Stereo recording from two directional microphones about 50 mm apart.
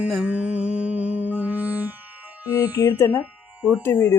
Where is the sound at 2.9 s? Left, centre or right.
Left.